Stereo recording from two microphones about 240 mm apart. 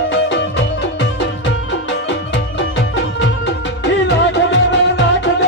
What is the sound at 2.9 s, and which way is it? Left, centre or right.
Music, left.